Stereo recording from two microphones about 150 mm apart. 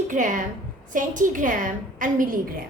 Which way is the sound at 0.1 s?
60° right (ahead or behind).